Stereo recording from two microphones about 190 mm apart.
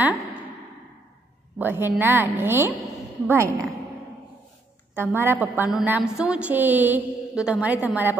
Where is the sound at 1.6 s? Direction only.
10° right (ahead or behind).